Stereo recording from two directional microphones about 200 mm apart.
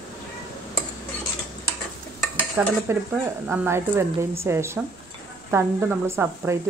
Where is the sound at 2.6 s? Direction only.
10° right (ahead or behind).